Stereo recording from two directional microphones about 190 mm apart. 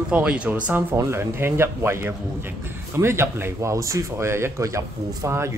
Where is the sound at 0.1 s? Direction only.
5° right (ahead or behind).